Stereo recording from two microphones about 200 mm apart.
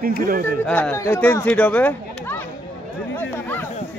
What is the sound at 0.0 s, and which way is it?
Speech, 45° right (ahead or behind).